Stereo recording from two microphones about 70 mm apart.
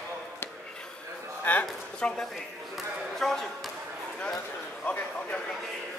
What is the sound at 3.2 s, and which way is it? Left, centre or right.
Speech, centre.